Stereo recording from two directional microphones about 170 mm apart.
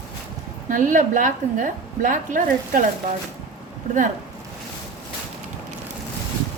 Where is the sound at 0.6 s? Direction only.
50° right (ahead or behind).